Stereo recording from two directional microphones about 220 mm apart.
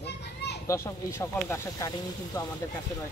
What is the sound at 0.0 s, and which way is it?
Children playing, 50° left (ahead or behind).